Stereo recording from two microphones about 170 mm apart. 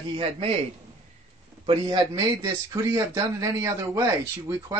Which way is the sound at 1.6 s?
30° right (ahead or behind).